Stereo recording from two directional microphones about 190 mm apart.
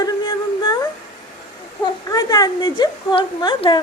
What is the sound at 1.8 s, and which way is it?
A woman's voice, 20° left (ahead or behind).